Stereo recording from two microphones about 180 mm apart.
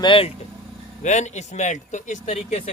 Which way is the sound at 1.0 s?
40° left (ahead or behind).